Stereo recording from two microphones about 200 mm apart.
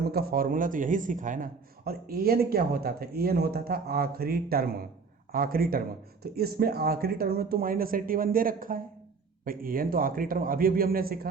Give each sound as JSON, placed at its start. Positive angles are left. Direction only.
{"t": 0.0, "sound": "a man's voice", "side_deg": -50}